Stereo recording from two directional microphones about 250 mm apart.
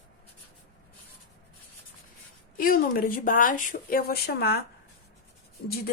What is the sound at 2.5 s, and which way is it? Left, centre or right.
A woman's voice, left.